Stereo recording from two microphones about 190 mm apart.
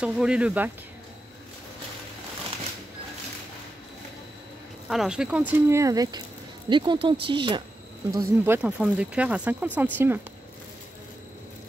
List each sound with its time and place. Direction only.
0.0 s speech: 5° right (ahead or behind)
4.8 s speech: centre (ahead or behind); by 7.6 s 25° right (ahead or behind)
8.1 s speech: 10° right (ahead or behind)